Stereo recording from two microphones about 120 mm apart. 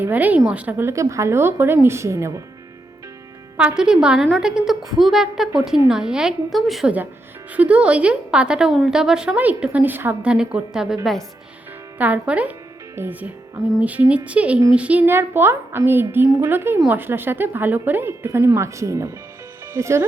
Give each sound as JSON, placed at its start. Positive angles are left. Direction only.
{"t": 0.0, "sound": "a woman's voice", "side_deg": -15}
{"t": 3.6, "sound": "a woman's voice", "side_deg": -10}
{"t": 10.3, "sound": "a woman's voice", "side_deg": -5}
{"t": 11.9, "sound": "a woman's voice", "side_deg": -10}